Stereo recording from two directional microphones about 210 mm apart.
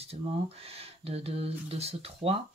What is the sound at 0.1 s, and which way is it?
Speech, 30° right (ahead or behind).